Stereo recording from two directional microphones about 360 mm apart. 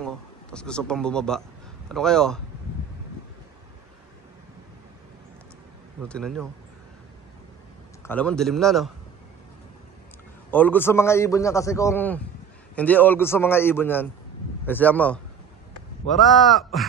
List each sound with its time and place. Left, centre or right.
0.0 s a man's voice: centre
6.0 s a man's voice: centre
8.1 s a man's voice: centre
10.5 s a man's voice: centre